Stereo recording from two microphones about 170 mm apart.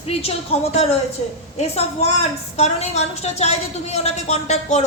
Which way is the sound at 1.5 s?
40° left (ahead or behind).